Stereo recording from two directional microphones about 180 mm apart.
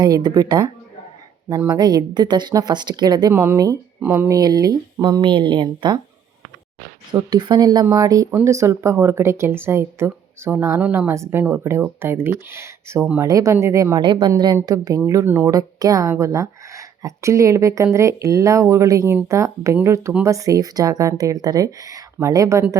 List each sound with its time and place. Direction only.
0.0 s a woman's voice: 20° right (ahead or behind)
7.1 s a woman's voice: 25° right (ahead or behind)